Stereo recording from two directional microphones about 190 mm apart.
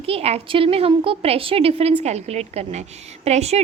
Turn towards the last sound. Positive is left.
turn(degrees=-35)  # may be behind; listen again after turning